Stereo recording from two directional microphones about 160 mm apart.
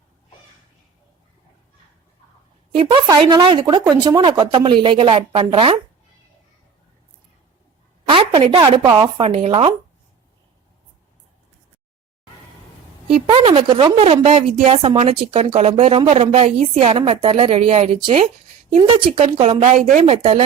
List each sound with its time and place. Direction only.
2.7 s a woman's voice: 30° right (ahead or behind)
8.0 s a sound: 30° right (ahead or behind)
8.4 s a woman's voice: 30° right (ahead or behind)
13.1 s a woman's voice: 35° right (ahead or behind)